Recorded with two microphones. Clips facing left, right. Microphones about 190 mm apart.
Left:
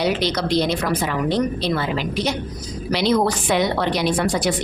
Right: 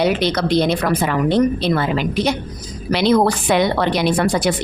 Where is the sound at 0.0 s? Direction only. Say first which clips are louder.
Right 3 dB; 55° right (ahead or behind).